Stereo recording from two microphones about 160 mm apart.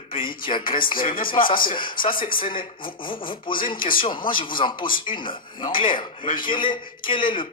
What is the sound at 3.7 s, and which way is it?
Speech, 60° left (ahead or behind).